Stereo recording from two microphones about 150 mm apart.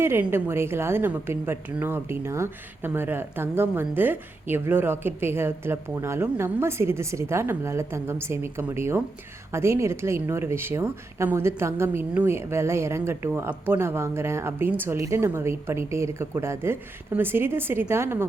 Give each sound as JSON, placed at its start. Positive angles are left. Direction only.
{"t": 0.0, "sound": "a woman's voice", "side_deg": -15}